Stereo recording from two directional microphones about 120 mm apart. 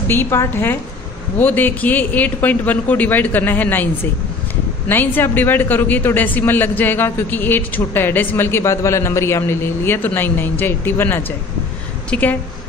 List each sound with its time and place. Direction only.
0.1 s a woman's voice: 20° left (ahead or behind)